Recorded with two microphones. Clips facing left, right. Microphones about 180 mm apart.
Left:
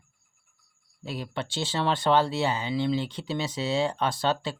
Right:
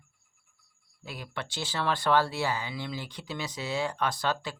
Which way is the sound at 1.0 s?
25° left (ahead or behind).